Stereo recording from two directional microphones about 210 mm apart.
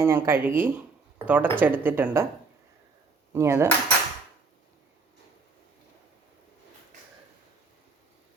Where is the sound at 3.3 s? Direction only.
15° right (ahead or behind).